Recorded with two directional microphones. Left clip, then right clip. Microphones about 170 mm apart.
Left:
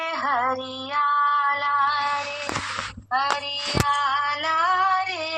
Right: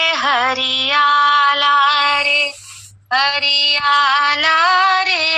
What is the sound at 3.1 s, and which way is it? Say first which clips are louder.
Female singing: right 9 dB; 25° right (ahead or behind).